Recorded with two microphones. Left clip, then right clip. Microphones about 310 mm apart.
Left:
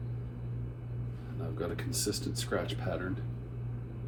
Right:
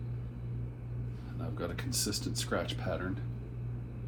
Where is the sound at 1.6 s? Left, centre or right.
Right.